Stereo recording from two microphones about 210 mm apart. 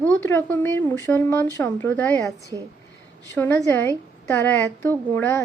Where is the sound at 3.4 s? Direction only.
10° left (ahead or behind).